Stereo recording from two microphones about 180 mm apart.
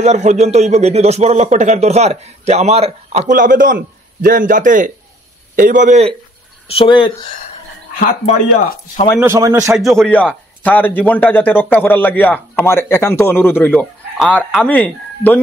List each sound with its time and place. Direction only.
0.0 s speech: 40° right (ahead or behind)
6.7 s speech: 30° left (ahead or behind)
9.2 s a man's voice: 15° right (ahead or behind)
9.8 s a man's voice: centre (ahead or behind)
14.1 s a man's voice: centre (ahead or behind)